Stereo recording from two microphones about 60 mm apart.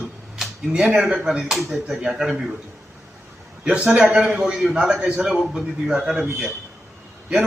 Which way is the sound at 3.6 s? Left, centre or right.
Centre.